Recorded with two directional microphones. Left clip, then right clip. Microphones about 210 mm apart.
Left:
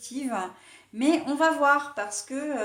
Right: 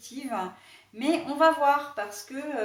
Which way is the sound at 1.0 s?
40° left (ahead or behind).